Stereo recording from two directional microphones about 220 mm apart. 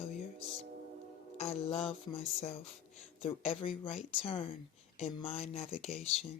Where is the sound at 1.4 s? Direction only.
25° left (ahead or behind).